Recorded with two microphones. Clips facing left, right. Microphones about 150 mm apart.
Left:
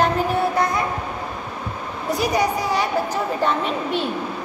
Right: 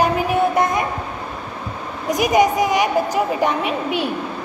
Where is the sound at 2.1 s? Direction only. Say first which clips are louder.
Right 5 dB; 20° right (ahead or behind).